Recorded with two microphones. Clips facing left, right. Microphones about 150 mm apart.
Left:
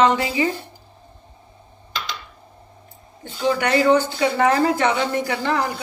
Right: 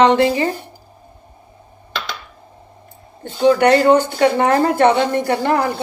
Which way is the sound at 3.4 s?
55° right (ahead or behind).